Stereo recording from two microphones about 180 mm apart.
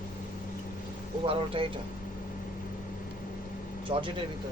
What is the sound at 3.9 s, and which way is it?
Speech, 30° right (ahead or behind).